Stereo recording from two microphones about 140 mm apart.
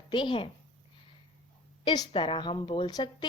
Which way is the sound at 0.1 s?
35° left (ahead or behind).